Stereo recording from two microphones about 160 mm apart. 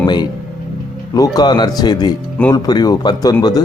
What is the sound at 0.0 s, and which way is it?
Speech, 25° left (ahead or behind).